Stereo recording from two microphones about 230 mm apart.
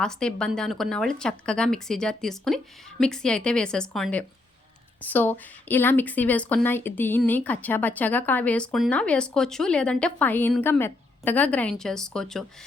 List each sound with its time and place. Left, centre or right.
0.0 s speech: centre